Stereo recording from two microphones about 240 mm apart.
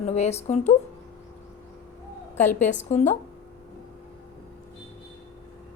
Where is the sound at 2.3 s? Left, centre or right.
Left.